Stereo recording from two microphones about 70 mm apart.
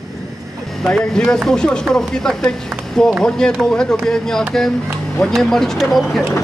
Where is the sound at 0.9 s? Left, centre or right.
Centre.